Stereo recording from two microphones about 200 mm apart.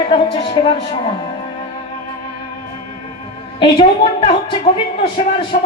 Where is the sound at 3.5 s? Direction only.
25° left (ahead or behind).